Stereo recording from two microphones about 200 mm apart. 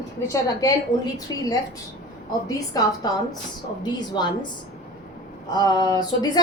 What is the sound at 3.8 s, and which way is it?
Speech, 20° left (ahead or behind).